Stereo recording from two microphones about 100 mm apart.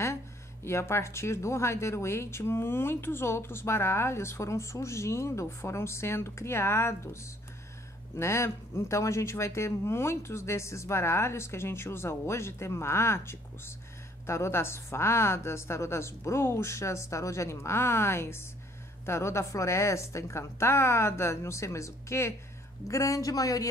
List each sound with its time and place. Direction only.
0.7 s speech: 25° left (ahead or behind)
8.2 s a woman's voice: 25° left (ahead or behind)